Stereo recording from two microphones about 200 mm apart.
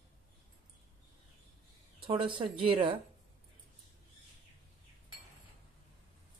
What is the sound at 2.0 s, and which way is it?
Speech, 25° right (ahead or behind).